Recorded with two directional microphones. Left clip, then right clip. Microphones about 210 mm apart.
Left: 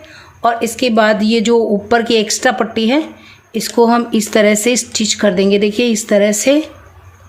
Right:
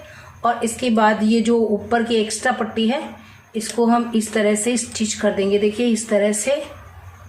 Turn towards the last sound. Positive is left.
turn(degrees=45)  # may be behind; listen again after turning